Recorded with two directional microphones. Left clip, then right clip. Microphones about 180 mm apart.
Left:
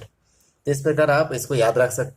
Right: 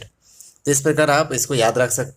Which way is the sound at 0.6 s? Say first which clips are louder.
Right 2 dB; 35° right (ahead or behind).